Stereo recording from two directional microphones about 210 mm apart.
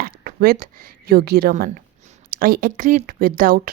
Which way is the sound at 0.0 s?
45° right (ahead or behind).